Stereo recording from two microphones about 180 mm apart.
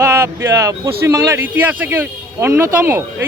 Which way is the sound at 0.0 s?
15° right (ahead or behind).